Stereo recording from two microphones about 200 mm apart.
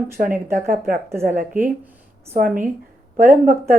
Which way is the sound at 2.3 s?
40° right (ahead or behind).